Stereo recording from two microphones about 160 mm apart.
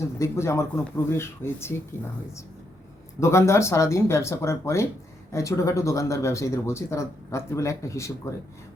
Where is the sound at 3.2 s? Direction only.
15° left (ahead or behind).